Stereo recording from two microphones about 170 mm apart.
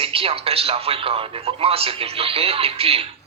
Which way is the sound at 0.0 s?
35° right (ahead or behind).